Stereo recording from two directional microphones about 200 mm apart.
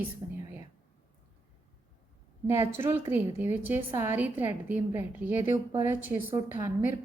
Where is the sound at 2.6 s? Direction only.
10° right (ahead or behind).